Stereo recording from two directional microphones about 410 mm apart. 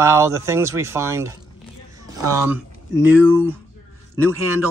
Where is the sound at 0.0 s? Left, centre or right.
Centre.